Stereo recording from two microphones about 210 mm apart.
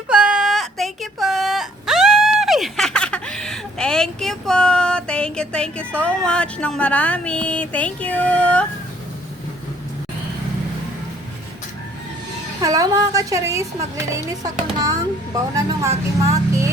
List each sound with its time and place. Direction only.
0.1 s whimper: 5° right (ahead or behind)
12.6 s a woman's voice: 15° right (ahead or behind)